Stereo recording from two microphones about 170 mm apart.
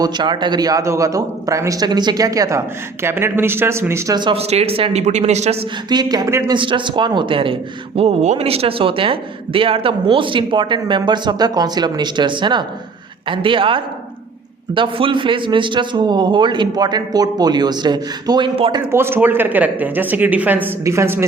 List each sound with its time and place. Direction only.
0.0 s speech: 25° right (ahead or behind)
5.9 s speech: 25° right (ahead or behind)
18.9 s speech: 15° right (ahead or behind)